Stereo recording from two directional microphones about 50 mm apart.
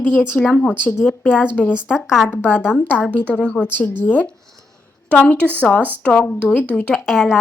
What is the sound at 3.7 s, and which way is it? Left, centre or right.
Speech, left.